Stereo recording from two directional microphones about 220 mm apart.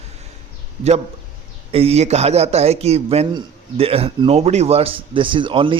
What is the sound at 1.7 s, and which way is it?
Speech, 25° right (ahead or behind).